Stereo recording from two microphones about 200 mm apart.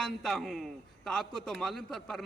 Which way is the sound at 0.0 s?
5° left (ahead or behind).